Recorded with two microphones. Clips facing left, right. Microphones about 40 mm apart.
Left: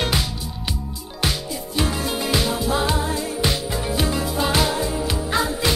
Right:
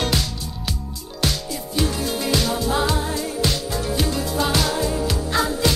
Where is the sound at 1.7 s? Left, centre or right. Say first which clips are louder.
Even; centre.